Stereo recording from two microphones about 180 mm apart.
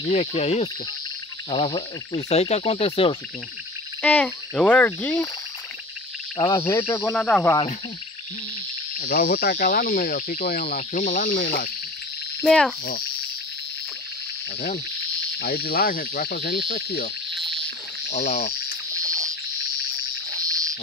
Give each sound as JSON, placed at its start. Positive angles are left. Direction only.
{"t": 0.0, "sound": "speech", "side_deg": 35}
{"t": 4.0, "sound": "speech", "side_deg": 5}
{"t": 6.3, "sound": "frog", "side_deg": 25}
{"t": 6.9, "sound": "speech", "side_deg": 10}
{"t": 8.9, "sound": "cricket", "side_deg": 55}
{"t": 12.4, "sound": "insect", "side_deg": 5}
{"t": 15.3, "sound": "insect", "side_deg": 60}
{"t": 18.1, "sound": "speech", "side_deg": 35}
{"t": 19.0, "sound": "frog", "side_deg": -20}